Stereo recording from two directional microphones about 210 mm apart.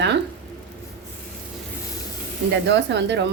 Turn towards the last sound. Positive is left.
turn(degrees=-55)  # may be behind; listen again after turning